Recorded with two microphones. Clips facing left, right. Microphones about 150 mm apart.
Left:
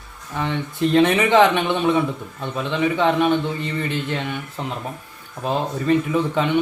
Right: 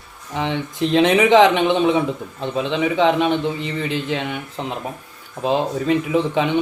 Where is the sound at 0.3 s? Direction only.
20° right (ahead or behind).